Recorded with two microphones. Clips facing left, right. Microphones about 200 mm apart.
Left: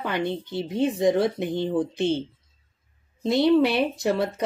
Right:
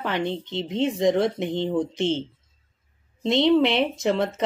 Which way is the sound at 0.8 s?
5° left (ahead or behind).